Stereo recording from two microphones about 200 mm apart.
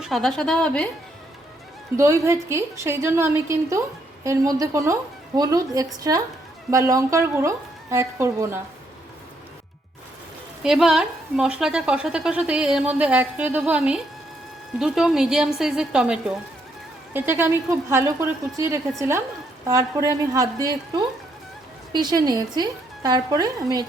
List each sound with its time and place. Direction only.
0.0 s a woman's voice: centre (ahead or behind)
2.0 s a woman's voice: 15° right (ahead or behind)
10.6 s a woman's voice: 5° right (ahead or behind); by 23.8 s 20° right (ahead or behind)